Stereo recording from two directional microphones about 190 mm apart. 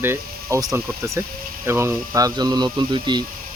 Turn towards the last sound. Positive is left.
turn(degrees=-25)  # may be behind; listen again after turning